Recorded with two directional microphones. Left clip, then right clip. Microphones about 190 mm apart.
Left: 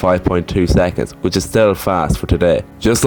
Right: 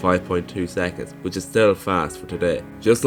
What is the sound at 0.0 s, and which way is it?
Speech, 45° left (ahead or behind).